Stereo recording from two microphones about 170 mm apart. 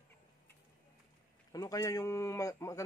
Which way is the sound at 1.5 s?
20° left (ahead or behind).